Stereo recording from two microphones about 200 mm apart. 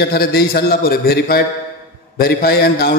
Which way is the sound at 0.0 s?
50° left (ahead or behind).